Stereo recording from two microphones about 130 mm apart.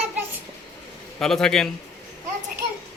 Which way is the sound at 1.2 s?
5° left (ahead or behind).